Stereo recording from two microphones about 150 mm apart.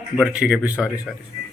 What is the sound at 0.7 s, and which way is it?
Speech, 15° left (ahead or behind).